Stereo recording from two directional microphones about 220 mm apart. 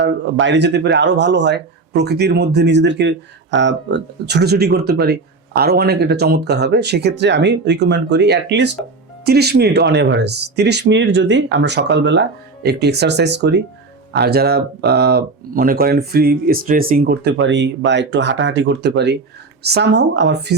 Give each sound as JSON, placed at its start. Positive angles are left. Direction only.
{"t": 0.0, "sound": "speech", "side_deg": -55}